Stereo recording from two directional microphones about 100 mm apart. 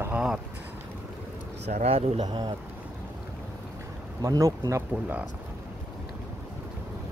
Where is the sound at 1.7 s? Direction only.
90° right.